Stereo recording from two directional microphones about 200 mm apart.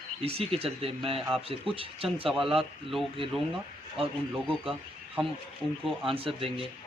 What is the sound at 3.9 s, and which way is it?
Speech, 25° right (ahead or behind).